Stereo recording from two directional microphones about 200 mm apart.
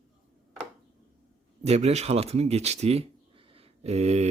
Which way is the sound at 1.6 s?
30° right (ahead or behind).